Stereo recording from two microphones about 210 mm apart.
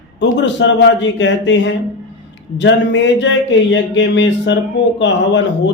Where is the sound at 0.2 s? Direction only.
60° left (ahead or behind).